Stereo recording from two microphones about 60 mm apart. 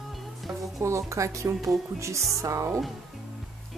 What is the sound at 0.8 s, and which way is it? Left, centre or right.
Speech, right.